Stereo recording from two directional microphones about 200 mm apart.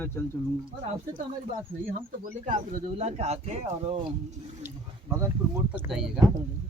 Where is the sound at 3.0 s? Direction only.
30° right (ahead or behind).